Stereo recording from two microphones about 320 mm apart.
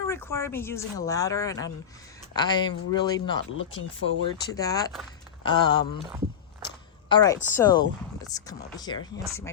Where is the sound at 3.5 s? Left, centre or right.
Left.